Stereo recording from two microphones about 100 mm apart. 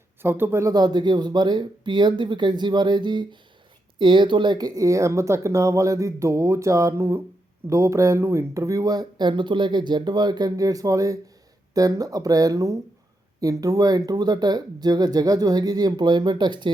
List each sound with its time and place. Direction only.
0.2 s speech: 20° right (ahead or behind)
0.7 s speech: 45° right (ahead or behind)